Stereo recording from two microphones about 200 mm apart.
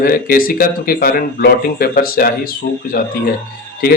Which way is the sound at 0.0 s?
45° left (ahead or behind).